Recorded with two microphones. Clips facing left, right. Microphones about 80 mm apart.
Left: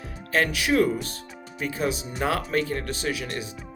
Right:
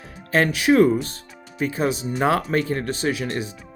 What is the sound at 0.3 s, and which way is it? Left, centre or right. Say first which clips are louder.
Speech: right 5 dB; right.